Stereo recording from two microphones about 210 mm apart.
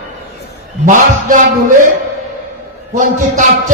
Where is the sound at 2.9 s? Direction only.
40° right (ahead or behind).